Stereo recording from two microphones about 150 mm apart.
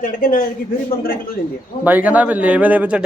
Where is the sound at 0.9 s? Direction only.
80° left.